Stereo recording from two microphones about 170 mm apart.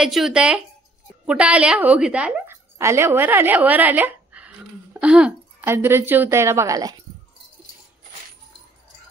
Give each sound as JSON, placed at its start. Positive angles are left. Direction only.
{"t": 0.0, "sound": "a woman's voice", "side_deg": 0}